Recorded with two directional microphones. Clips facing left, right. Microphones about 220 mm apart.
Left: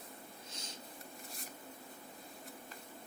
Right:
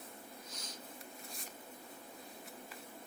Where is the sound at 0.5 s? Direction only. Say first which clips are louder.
Left 2 dB; 25° left (ahead or behind).